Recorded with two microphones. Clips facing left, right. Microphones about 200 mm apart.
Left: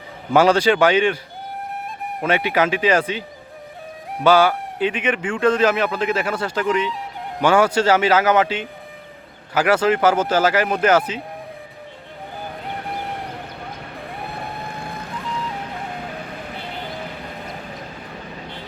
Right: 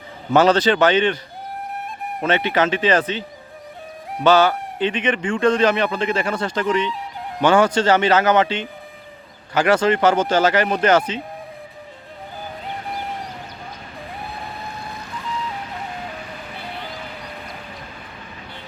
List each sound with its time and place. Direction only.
0.3 s speech: 10° left (ahead or behind)
2.2 s speech: 10° left (ahead or behind)